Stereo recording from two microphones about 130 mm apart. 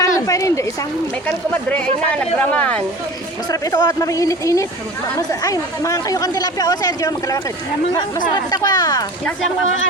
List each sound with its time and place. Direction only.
0.0 s a sound: 25° left (ahead or behind)
1.8 s speech: 10° left (ahead or behind)
3.5 s speech: 25° left (ahead or behind)
8.4 s speech: 30° left (ahead or behind)